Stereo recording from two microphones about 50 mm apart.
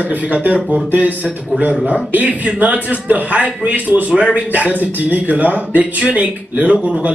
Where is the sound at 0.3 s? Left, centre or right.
Right.